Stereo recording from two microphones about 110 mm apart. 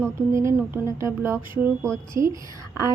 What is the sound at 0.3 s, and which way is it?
A woman's voice, 25° right (ahead or behind).